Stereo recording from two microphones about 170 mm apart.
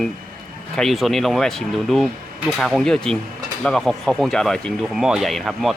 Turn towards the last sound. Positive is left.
turn(degrees=0)  # may be behind; listen again after turning